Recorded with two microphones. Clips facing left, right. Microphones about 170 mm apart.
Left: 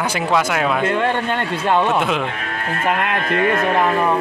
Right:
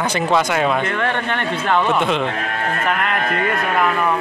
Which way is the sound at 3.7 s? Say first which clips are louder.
Left 1 dB; 30° left (ahead or behind).